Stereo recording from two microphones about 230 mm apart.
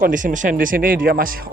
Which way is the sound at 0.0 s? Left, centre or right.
Right.